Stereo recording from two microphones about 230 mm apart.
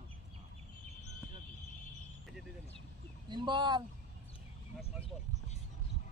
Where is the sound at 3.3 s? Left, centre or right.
Centre.